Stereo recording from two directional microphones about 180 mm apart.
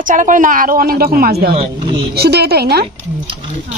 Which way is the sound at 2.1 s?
60° right (ahead or behind).